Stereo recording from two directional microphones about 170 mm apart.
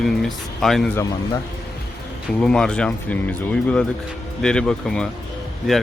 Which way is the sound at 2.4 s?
5° left (ahead or behind).